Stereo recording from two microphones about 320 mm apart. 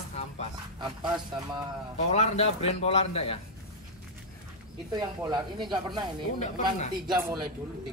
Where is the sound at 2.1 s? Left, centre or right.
Centre.